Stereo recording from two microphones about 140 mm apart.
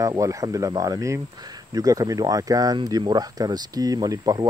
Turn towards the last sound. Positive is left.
turn(degrees=-25)  # may be behind; listen again after turning